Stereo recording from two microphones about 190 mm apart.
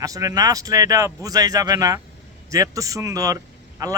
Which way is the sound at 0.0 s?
15° right (ahead or behind).